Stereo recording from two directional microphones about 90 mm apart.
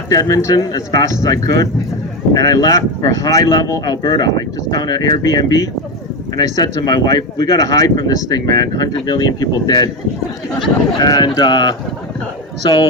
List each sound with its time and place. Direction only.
0.1 s speech: 40° left (ahead or behind)